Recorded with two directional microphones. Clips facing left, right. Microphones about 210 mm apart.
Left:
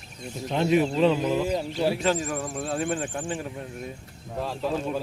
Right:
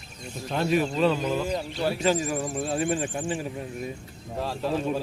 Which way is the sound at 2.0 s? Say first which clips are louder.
Right 1 dB; 5° right (ahead or behind).